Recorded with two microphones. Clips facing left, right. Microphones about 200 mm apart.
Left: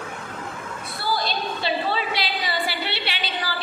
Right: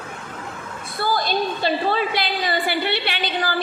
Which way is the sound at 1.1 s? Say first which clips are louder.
Right 3 dB; 45° right (ahead or behind).